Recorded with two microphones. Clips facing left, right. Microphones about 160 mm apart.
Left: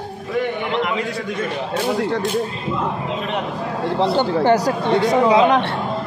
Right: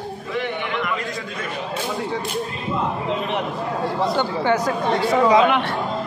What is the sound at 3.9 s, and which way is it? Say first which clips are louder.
Speech: left 6 dB; 30° left (ahead or behind).